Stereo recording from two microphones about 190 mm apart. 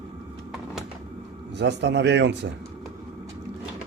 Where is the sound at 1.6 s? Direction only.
65° right (ahead or behind).